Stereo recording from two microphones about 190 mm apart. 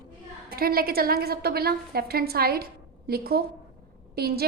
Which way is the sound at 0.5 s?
50° right (ahead or behind).